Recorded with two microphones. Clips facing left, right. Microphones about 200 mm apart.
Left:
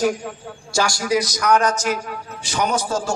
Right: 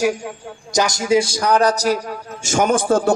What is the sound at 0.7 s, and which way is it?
A man's voice, 20° right (ahead or behind).